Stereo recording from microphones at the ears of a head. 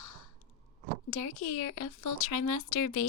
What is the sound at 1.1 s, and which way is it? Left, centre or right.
A woman's voice, left.